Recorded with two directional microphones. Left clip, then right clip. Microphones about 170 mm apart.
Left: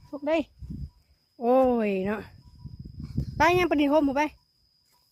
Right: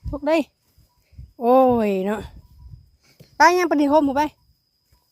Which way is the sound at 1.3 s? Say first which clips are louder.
Right 6 dB; 35° right (ahead or behind).